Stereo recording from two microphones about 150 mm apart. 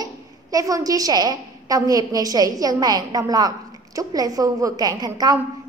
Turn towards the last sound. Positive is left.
turn(degrees=-25)  # may be behind; listen again after turning